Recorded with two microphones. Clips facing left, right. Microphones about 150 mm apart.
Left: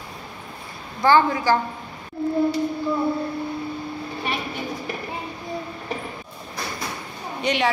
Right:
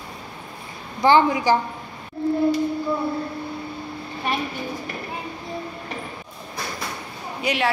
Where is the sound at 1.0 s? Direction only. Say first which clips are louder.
Right 1 dB; 20° right (ahead or behind).